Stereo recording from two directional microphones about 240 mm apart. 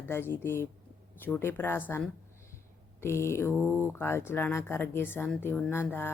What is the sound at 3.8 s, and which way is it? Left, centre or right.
Speech, centre.